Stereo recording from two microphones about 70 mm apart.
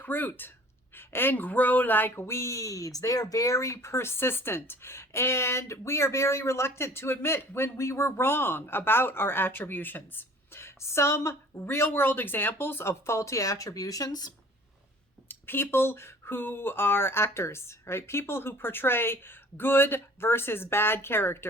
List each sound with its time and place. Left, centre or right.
0.0 s speech: left
11.6 s speech: left
12.9 s speech: left
15.3 s speech: left